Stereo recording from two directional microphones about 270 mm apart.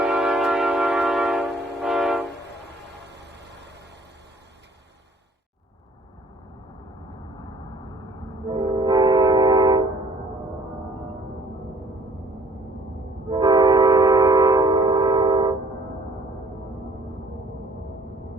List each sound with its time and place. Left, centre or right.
0.0 s train: centre
3.0 s vehicle: right
7.0 s vehicle: centre
8.4 s train: centre
13.3 s train: centre